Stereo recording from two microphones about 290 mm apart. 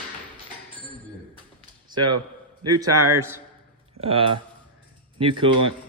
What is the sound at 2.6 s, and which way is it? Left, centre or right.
Speech, right.